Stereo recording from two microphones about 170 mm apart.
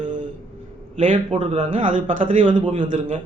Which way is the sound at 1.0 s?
50° right (ahead or behind).